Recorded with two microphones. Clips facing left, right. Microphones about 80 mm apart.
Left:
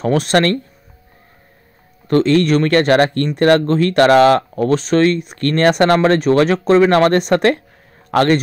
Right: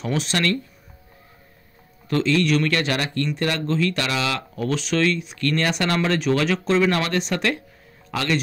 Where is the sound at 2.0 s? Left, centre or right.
Left.